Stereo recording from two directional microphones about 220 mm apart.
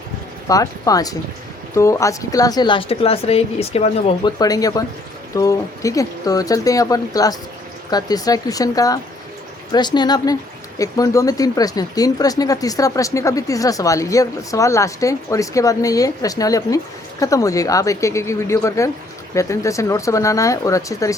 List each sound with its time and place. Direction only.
0.4 s speech: 15° left (ahead or behind)
4.4 s speech: 15° left (ahead or behind)